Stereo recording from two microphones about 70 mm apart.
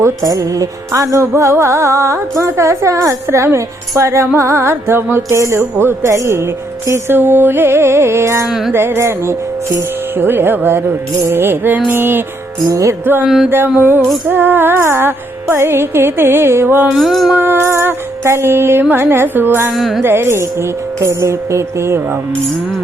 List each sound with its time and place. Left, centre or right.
0.0 s music: right
1.4 s speech: right
4.4 s music: right
5.4 s speech: right
6.0 s music: right
8.4 s music: centre
8.7 s music: right
12.6 s speech: right
13.2 s music: centre
13.7 s music: right
17.0 s music: centre
17.3 s music: right
19.7 s music: centre
20.0 s music: right